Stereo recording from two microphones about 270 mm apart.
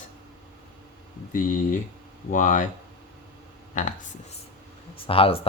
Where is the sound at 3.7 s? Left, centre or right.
Left.